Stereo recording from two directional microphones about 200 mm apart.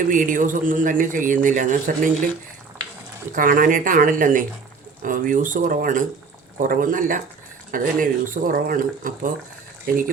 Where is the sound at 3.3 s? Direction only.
40° right (ahead or behind).